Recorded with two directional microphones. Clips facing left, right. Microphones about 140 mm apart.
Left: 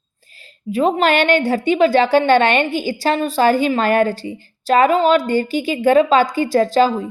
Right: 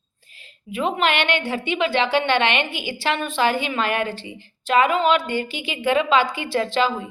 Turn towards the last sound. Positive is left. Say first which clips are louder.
# left 7 dB
turn(degrees=40)  # may be behind; listen again after turning